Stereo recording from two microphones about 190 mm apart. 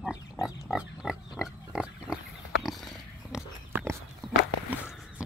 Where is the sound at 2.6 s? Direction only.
Centre (ahead or behind).